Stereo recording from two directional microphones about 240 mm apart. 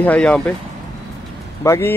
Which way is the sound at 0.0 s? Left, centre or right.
Centre.